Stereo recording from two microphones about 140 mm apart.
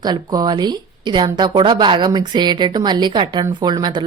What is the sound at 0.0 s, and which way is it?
A woman's voice, 30° right (ahead or behind).